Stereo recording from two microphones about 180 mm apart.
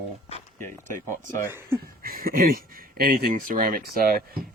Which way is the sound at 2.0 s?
55° right (ahead or behind).